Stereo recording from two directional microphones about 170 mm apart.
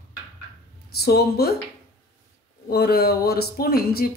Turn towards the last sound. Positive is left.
turn(degrees=65)  # may be behind; listen again after turning